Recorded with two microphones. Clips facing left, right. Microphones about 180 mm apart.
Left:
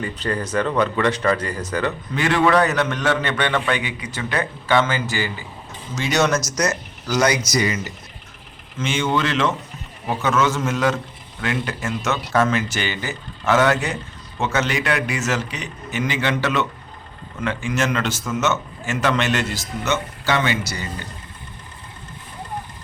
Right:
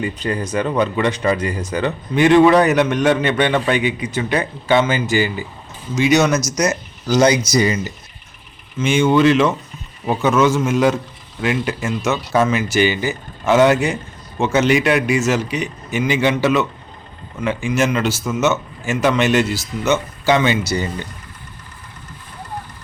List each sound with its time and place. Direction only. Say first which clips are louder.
0.0 s speech: right 3 dB; 15° right (ahead or behind)
7.1 s speech: right 5 dB; 25° right (ahead or behind)
8.8 s speech: right 8 dB; 10° right (ahead or behind)